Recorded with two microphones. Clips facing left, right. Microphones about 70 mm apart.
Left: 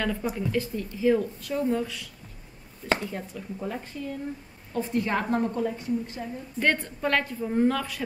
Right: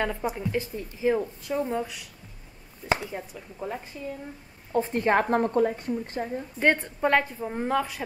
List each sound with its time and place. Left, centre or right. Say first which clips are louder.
0.0 s speech: even; right
4.7 s a woman's voice: right 4 dB; right
6.6 s speech: right 2 dB; right